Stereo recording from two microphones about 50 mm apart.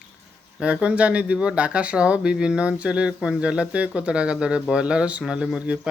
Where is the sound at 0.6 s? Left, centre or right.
Right.